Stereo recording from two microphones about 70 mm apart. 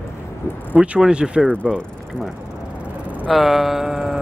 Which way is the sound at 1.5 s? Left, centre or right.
Centre.